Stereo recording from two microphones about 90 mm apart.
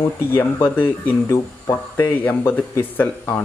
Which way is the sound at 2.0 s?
20° left (ahead or behind).